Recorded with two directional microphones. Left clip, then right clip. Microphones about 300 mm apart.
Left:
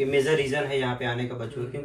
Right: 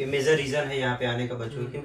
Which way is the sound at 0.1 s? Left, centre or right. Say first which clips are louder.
Right 4 dB; centre.